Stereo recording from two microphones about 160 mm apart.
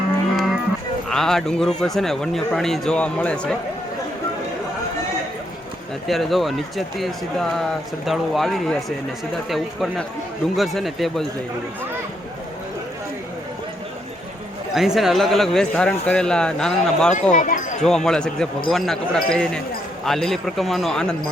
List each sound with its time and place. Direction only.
0.3 s music: centre (ahead or behind)
1.1 s speech: centre (ahead or behind)
6.1 s speech: centre (ahead or behind)
14.8 s speech: centre (ahead or behind)
17.3 s speech: 50° left (ahead or behind)
17.8 s speech: 5° left (ahead or behind)